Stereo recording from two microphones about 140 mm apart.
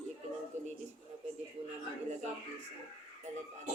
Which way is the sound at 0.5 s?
60° right (ahead or behind).